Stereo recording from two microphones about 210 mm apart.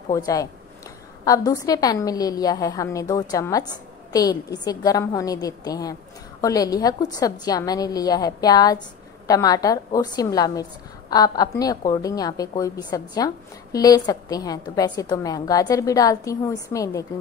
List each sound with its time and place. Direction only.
0.1 s a woman's voice: 15° left (ahead or behind)